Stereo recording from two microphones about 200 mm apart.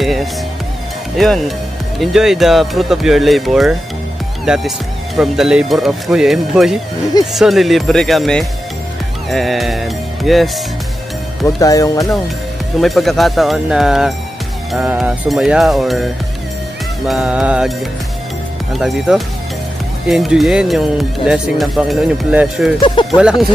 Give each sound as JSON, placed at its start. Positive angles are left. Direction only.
{"t": 0.0, "sound": "music", "side_deg": 0}
{"t": 1.1, "sound": "speech", "side_deg": 0}
{"t": 11.4, "sound": "speech", "side_deg": 15}
{"t": 12.8, "sound": "speech", "side_deg": 0}
{"t": 17.1, "sound": "speech", "side_deg": -5}
{"t": 18.8, "sound": "speech", "side_deg": 0}
{"t": 22.8, "sound": "speech", "side_deg": 25}
{"t": 23.1, "sound": "speech", "side_deg": -5}